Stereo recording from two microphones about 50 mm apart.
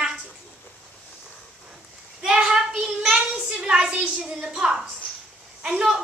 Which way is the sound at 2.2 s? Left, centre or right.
Centre.